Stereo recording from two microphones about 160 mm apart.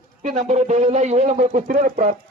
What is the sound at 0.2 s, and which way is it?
Speech, 50° right (ahead or behind).